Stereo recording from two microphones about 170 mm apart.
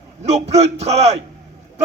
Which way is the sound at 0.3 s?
40° right (ahead or behind).